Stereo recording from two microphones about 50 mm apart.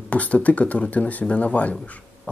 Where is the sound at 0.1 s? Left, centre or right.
Left.